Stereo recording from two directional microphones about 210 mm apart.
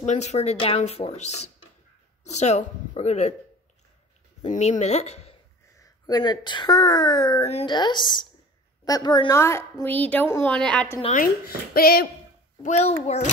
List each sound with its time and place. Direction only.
0.0 s speech: 35° left (ahead or behind)
4.4 s speech: 30° left (ahead or behind)
5.8 s a woman's voice: 20° left (ahead or behind)
11.0 s speech: 30° left (ahead or behind)
11.4 s speech: 45° left (ahead or behind)
12.6 s speech: 30° left (ahead or behind)